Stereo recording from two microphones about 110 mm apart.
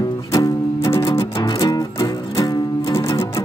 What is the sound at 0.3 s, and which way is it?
Music, 30° left (ahead or behind).